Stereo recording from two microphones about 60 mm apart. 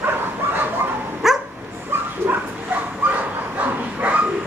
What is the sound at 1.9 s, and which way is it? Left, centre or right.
Bow-wow, right.